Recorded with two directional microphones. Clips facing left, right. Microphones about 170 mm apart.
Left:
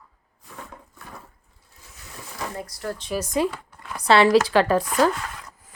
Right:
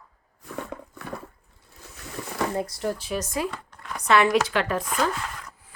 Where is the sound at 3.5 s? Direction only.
5° left (ahead or behind).